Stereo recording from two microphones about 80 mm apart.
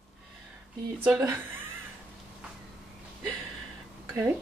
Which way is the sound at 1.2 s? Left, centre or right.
Right.